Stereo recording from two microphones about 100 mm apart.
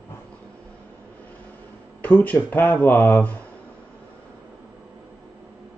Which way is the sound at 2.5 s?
20° left (ahead or behind).